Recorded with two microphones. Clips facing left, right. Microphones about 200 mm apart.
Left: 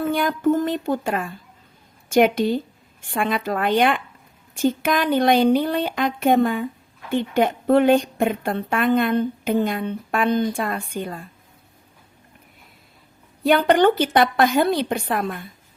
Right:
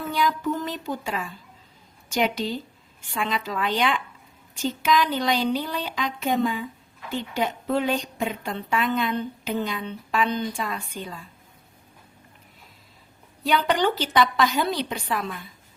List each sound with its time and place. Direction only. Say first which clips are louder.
0.0 s a woman's voice: left 5 dB; 55° left (ahead or behind)
13.4 s a woman's voice: left 7 dB; 55° left (ahead or behind)